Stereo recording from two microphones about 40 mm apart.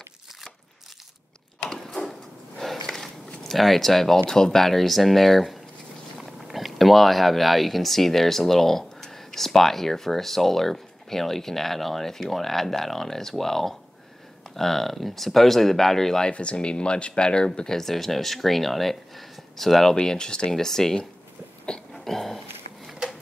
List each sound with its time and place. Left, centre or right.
1.7 s a sound: centre
3.4 s speech: centre
16.3 s speech: left
17.6 s speech: centre
20.0 s speech: left
20.5 s speech: centre
21.6 s a sound: centre
22.0 s dog: centre